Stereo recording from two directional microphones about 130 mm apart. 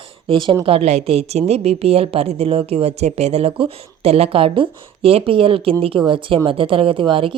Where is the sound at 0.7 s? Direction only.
50° right (ahead or behind).